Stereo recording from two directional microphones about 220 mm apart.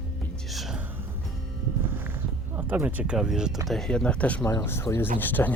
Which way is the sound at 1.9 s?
10° right (ahead or behind).